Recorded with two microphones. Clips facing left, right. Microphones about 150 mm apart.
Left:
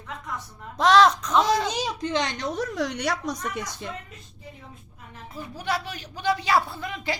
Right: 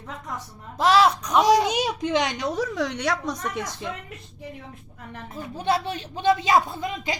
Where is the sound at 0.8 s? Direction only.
5° right (ahead or behind).